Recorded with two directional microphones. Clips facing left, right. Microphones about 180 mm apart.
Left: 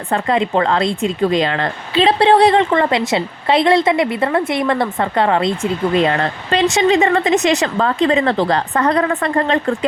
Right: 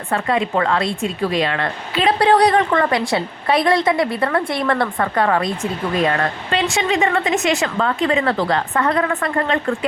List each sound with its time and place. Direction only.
0.1 s a woman's voice: 30° left (ahead or behind)